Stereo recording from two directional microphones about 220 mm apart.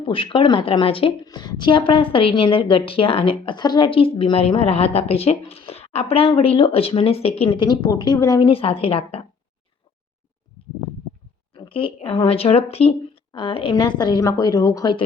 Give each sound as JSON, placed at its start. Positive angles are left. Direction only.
{"t": 0.0, "sound": "a woman's voice", "side_deg": 25}
{"t": 11.5, "sound": "a woman's voice", "side_deg": 20}